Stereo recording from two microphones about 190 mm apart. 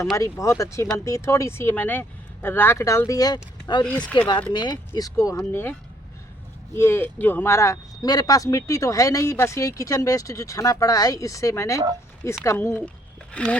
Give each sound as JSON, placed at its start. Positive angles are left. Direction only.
{"t": 0.0, "sound": "speech", "side_deg": 15}
{"t": 3.8, "sound": "speech", "side_deg": 5}
{"t": 4.5, "sound": "speech", "side_deg": 20}
{"t": 6.7, "sound": "speech", "side_deg": 10}